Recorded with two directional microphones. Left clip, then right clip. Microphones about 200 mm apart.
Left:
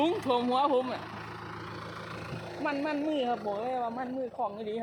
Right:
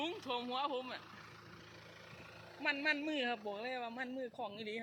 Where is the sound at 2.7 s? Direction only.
50° right (ahead or behind).